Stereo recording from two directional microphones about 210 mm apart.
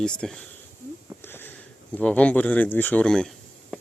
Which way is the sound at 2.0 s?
5° left (ahead or behind).